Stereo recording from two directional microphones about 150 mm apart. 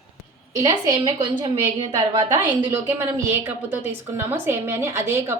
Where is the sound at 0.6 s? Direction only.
25° right (ahead or behind).